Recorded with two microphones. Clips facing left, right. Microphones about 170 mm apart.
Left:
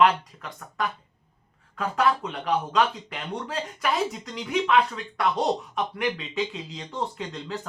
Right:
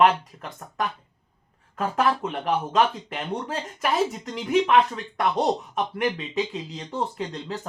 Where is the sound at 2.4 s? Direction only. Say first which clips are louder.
Right 1 dB; 45° right (ahead or behind).